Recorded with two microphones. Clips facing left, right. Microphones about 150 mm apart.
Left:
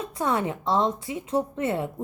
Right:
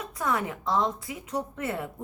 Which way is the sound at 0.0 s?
30° left (ahead or behind).